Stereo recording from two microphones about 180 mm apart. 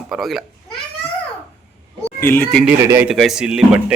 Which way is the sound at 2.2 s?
10° left (ahead or behind).